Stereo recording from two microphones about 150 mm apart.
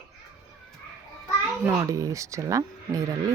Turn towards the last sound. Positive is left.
turn(degrees=-20)  # may be behind; listen again after turning